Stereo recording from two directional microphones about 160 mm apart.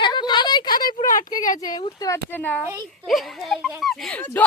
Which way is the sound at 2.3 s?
10° left (ahead or behind).